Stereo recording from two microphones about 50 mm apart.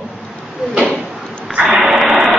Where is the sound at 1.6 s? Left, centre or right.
Centre.